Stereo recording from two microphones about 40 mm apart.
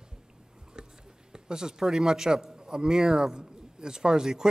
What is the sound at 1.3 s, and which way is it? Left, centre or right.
A man's voice, centre.